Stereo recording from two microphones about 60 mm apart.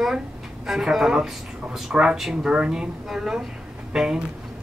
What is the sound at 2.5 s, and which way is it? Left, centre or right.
Speech, centre.